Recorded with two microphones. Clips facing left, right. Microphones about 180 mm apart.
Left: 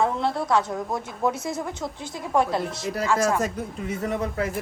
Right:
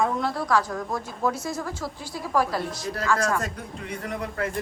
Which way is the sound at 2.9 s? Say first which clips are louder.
Left 2 dB; 20° left (ahead or behind).